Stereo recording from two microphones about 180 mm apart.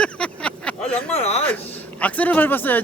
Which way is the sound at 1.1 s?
35° left (ahead or behind).